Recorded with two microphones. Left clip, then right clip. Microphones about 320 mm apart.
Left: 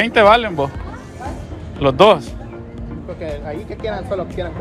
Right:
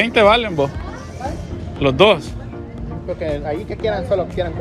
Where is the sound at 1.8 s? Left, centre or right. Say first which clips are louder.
Left 2 dB; centre.